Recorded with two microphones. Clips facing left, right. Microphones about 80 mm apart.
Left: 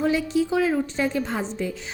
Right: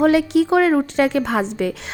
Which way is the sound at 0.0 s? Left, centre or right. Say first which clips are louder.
Right 7 dB; right.